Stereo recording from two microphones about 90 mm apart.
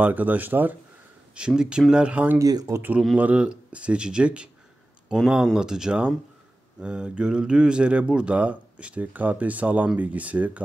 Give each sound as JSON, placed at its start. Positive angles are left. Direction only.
{"t": 0.0, "sound": "a man's voice", "side_deg": -20}
{"t": 1.3, "sound": "speech", "side_deg": -10}
{"t": 2.3, "sound": "speech", "side_deg": -40}
{"t": 3.2, "sound": "speech", "side_deg": -15}